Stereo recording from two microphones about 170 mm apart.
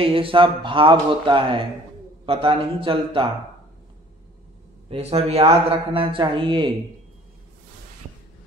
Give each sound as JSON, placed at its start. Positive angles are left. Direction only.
{"t": 0.0, "sound": "speech", "side_deg": -30}
{"t": 4.8, "sound": "speech", "side_deg": -35}